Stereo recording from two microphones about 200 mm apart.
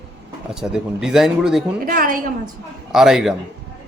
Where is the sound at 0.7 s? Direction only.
Centre (ahead or behind).